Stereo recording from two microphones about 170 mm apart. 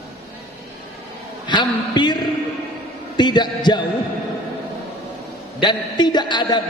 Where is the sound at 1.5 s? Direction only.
25° left (ahead or behind).